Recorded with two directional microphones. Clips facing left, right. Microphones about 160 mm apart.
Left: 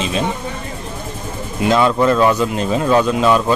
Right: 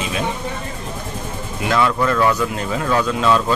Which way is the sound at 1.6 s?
20° left (ahead or behind).